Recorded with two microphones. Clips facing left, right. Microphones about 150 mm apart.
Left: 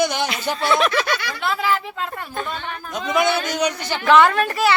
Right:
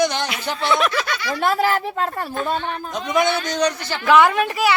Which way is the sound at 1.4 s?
45° right (ahead or behind).